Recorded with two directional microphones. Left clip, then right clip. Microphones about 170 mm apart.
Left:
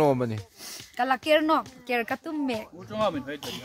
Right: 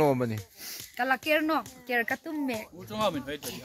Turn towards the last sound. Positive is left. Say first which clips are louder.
# left 2 dB
turn(degrees=-50)  # may be behind; listen again after turning